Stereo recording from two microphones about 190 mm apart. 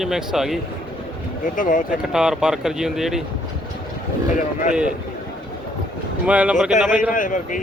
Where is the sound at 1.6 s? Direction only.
45° left (ahead or behind).